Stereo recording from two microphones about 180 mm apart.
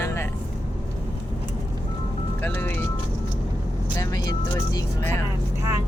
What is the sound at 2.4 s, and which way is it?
Speech, 10° left (ahead or behind).